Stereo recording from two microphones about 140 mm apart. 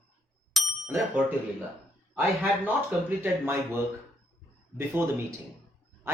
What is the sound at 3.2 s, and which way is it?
Speech, 15° right (ahead or behind).